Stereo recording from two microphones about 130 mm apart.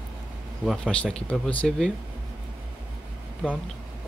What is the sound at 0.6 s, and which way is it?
Speech, 5° left (ahead or behind).